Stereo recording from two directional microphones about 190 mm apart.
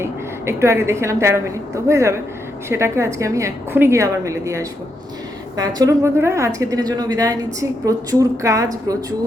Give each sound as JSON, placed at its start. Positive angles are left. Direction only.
{"t": 0.0, "sound": "a woman's voice", "side_deg": -15}